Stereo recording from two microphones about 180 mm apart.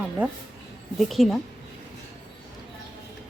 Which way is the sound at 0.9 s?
Centre (ahead or behind).